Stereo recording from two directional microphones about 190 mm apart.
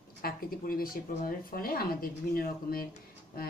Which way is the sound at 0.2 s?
50° left (ahead or behind).